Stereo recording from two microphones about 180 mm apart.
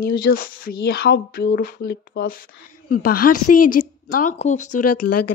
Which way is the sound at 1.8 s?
70° left (ahead or behind).